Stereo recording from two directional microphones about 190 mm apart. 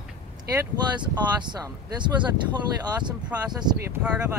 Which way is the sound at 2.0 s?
25° right (ahead or behind).